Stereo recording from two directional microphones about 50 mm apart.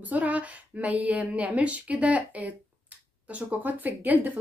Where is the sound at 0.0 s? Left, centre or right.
Right.